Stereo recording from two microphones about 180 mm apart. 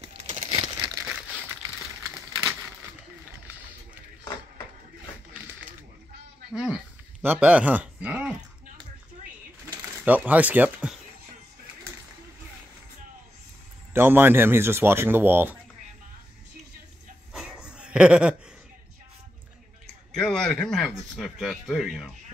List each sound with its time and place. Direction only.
0.0 s crumpling: 35° right (ahead or behind)
6.5 s a sound: 5° right (ahead or behind)
10.0 s speech: 10° right (ahead or behind)
13.9 s speech: 10° right (ahead or behind)
17.3 s a sound: 5° right (ahead or behind)
20.1 s a man's voice: 5° left (ahead or behind)